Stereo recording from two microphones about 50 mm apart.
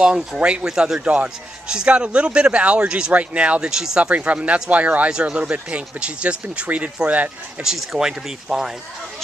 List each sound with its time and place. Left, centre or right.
0.0 s speech: centre
0.4 s speech: right
0.7 s speech: centre
3.7 s speech: centre
4.0 s speech: right
7.6 s speech: centre